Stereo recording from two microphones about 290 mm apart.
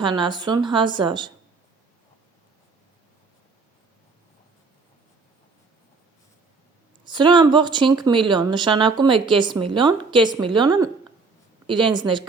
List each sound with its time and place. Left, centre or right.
0.0 s speech: centre
7.0 s speech: centre